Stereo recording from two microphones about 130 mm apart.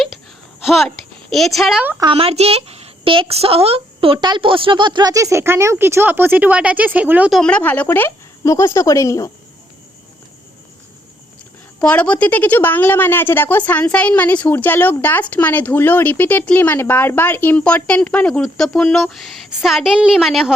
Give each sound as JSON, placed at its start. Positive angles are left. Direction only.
{"t": 0.6, "sound": "a woman's voice", "side_deg": 0}
{"t": 2.1, "sound": "speech", "side_deg": -50}
{"t": 7.3, "sound": "speech", "side_deg": 5}
{"t": 11.8, "sound": "a woman's voice", "side_deg": 10}